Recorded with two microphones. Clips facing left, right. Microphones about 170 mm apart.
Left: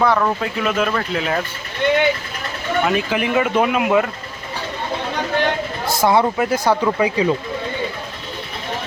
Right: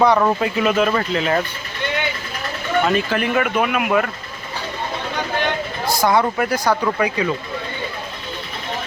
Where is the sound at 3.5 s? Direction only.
25° left (ahead or behind).